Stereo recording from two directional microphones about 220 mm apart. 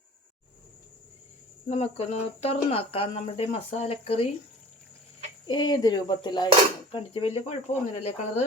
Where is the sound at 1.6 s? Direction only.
30° left (ahead or behind).